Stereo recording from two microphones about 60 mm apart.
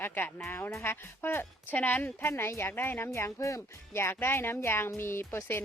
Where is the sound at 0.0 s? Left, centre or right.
Left.